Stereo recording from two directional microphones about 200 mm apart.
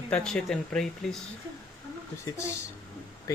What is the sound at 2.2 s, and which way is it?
Speech, 15° left (ahead or behind).